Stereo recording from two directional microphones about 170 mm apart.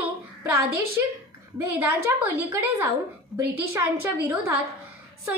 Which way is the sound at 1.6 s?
15° right (ahead or behind).